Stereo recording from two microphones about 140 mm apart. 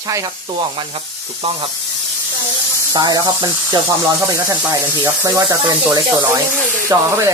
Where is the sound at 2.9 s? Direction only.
30° right (ahead or behind).